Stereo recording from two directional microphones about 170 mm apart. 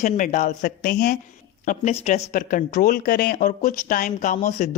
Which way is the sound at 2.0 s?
50° left (ahead or behind).